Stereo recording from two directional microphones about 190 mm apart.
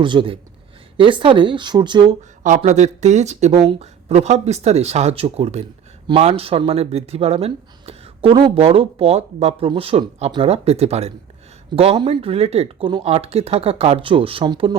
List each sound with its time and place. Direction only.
0.0 s speech: 25° right (ahead or behind)
2.6 s speech: 35° right (ahead or behind)